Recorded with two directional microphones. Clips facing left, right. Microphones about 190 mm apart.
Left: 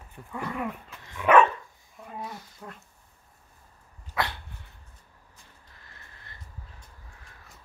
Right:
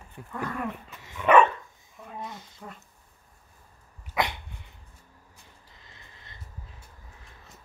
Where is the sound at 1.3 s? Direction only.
5° left (ahead or behind).